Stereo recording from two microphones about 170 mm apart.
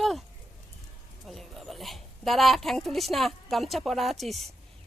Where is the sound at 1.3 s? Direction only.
Centre (ahead or behind).